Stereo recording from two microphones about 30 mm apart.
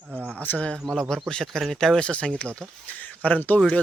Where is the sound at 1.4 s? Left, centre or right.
Centre.